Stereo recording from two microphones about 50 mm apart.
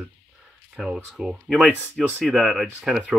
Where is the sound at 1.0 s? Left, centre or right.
Centre.